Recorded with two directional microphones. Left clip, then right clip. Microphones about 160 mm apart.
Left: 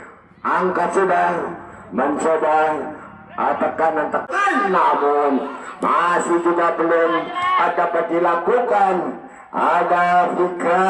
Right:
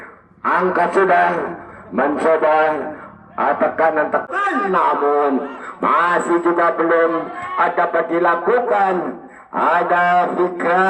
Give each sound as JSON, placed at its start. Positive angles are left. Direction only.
{"t": 0.4, "sound": "a man's voice", "side_deg": -15}